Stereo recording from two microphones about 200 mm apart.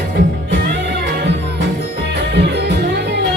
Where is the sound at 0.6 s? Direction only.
55° right (ahead or behind).